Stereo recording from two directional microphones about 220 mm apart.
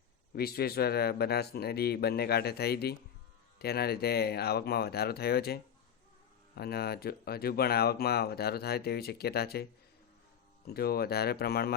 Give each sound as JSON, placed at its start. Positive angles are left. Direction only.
{"t": 0.3, "sound": "speech", "side_deg": 45}
{"t": 6.6, "sound": "speech", "side_deg": 45}
{"t": 10.8, "sound": "speech", "side_deg": 45}